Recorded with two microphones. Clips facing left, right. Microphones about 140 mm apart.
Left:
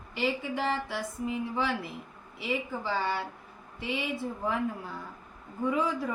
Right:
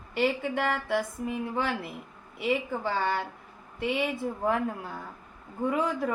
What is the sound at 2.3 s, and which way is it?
Speech, 50° right (ahead or behind).